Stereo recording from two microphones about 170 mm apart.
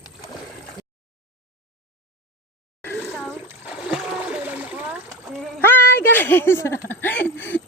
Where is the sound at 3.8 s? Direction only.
5° right (ahead or behind).